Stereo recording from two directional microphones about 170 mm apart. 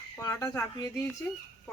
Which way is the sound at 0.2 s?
20° left (ahead or behind).